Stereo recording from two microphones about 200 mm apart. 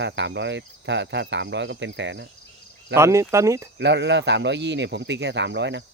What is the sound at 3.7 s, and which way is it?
Speech, 60° right (ahead or behind).